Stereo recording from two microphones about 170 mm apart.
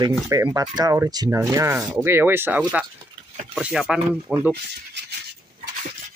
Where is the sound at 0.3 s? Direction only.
20° right (ahead or behind).